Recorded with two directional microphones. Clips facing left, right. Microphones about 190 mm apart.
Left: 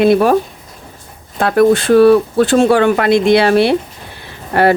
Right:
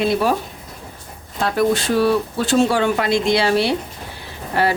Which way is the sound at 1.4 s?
55° left (ahead or behind).